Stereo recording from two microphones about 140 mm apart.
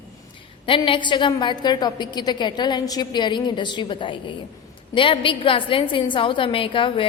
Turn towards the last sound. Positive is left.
turn(degrees=40)  # may be behind; listen again after turning